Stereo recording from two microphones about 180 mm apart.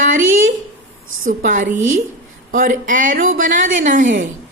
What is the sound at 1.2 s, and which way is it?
A woman's voice, 45° right (ahead or behind).